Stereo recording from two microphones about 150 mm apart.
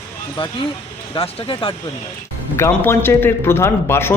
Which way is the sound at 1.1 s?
35° left (ahead or behind).